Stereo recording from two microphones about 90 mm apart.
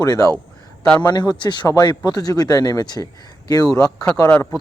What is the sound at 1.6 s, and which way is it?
A man's voice, 40° left (ahead or behind).